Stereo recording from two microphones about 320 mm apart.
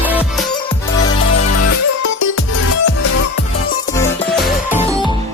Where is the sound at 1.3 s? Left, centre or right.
Left.